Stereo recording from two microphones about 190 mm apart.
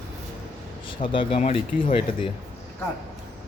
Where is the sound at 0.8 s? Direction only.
25° left (ahead or behind).